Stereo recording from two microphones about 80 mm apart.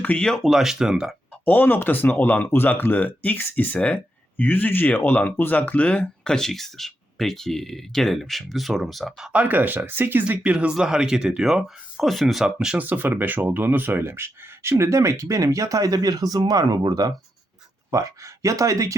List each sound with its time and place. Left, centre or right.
0.0 s speech: centre
0.5 s speech: centre
1.5 s speech: left; by 9.3 s centre
9.3 s speech: centre; by 17.2 s right
17.9 s speech: right